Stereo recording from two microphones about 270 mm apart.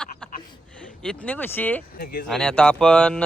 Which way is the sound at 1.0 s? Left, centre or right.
Centre.